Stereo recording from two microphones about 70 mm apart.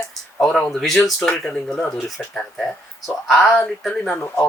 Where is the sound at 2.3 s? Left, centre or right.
Centre.